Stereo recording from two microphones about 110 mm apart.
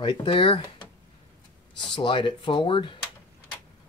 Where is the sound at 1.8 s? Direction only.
45° left (ahead or behind).